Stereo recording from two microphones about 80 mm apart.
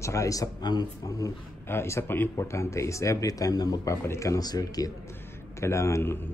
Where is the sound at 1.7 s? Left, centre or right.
Left.